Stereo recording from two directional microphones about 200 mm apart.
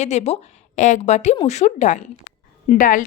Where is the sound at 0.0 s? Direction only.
35° left (ahead or behind).